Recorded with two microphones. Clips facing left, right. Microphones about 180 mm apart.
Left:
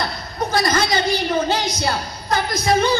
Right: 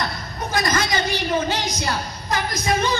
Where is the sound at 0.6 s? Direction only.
35° left (ahead or behind).